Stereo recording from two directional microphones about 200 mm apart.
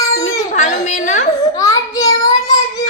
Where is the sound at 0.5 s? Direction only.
35° left (ahead or behind).